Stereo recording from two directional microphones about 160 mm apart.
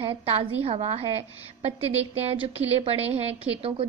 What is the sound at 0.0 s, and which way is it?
A woman's voice, 35° right (ahead or behind).